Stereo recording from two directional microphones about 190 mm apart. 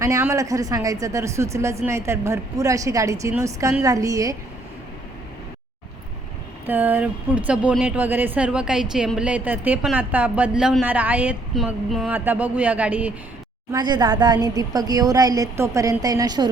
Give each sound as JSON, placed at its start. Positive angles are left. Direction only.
{"t": 0.0, "sound": "speech", "side_deg": -15}
{"t": 6.7, "sound": "speech", "side_deg": -10}
{"t": 13.7, "sound": "speech", "side_deg": -25}